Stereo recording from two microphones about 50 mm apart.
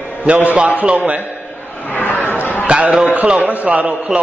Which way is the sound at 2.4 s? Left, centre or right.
Left.